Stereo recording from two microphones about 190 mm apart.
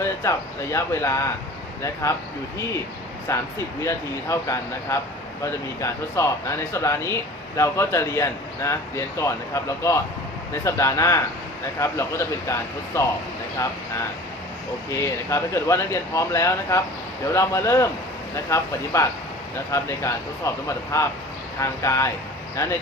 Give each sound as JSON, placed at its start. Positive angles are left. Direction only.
{"t": 0.0, "sound": "speech", "side_deg": 15}
{"t": 3.2, "sound": "speech", "side_deg": 15}
{"t": 14.8, "sound": "speech", "side_deg": 15}